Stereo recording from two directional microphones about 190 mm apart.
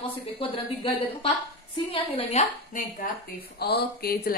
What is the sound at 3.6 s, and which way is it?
Speech, 55° left (ahead or behind).